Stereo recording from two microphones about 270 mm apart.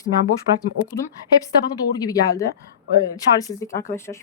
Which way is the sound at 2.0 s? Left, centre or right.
Centre.